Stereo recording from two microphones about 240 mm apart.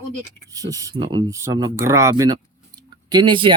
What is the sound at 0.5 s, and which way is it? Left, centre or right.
Speech, centre.